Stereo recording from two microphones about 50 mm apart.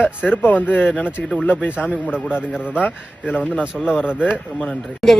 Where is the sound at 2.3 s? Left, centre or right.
Left.